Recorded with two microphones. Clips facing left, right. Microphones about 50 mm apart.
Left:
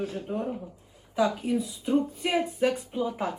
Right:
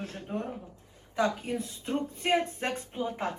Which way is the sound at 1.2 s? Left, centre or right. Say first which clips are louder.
Left 4 dB; right.